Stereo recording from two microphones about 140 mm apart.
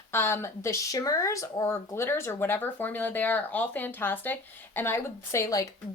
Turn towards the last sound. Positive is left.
turn(degrees=20)  # may be behind; listen again after turning